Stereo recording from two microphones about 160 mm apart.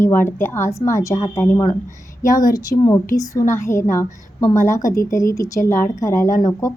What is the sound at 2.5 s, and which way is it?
A woman's voice, 25° left (ahead or behind).